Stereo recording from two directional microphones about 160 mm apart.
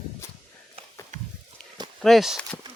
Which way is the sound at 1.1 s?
45° right (ahead or behind).